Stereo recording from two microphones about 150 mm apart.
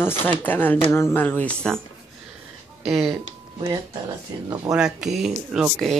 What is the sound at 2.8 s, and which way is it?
Speech, centre (ahead or behind).